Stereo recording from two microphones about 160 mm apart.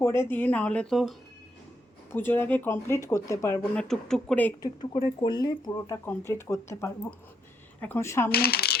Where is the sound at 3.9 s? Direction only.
Centre (ahead or behind).